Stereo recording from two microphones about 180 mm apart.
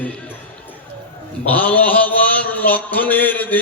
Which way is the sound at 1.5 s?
10° left (ahead or behind).